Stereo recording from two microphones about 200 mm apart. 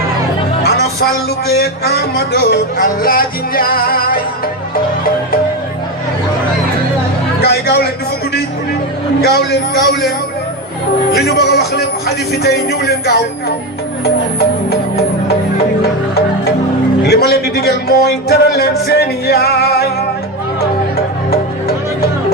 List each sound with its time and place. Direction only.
0.6 s music: 55° left (ahead or behind)
1.5 s speech: 55° left (ahead or behind)
7.4 s a man's voice: 55° left (ahead or behind)
9.2 s speech: 55° left (ahead or behind)
11.1 s speech: 55° left (ahead or behind)
17.1 s speech: 50° left (ahead or behind)